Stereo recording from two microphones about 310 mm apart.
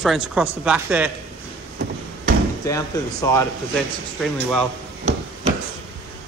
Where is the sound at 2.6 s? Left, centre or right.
Centre.